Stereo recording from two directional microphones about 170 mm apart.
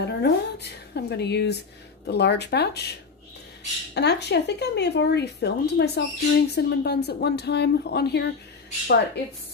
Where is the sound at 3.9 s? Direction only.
85° left.